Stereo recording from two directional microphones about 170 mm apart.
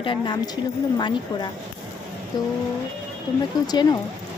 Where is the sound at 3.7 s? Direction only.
25° left (ahead or behind).